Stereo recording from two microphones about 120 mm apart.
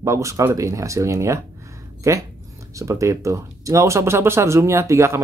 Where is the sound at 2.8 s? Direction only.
25° right (ahead or behind).